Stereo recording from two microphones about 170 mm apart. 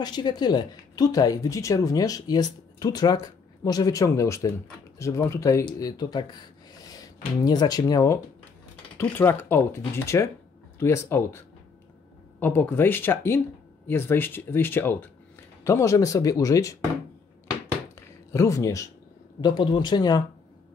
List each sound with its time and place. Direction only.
0.0 s speech: 25° left (ahead or behind)
7.4 s speech: 25° left (ahead or behind)
18.3 s speech: 20° left (ahead or behind)